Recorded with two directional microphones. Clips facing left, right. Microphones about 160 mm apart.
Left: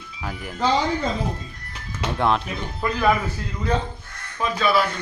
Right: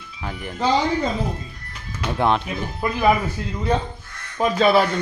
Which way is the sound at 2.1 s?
Centre (ahead or behind).